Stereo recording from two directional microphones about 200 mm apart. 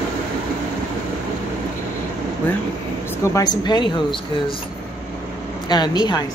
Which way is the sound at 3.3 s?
20° left (ahead or behind).